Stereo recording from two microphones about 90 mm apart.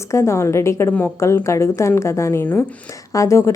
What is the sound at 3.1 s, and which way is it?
Speech, 35° left (ahead or behind).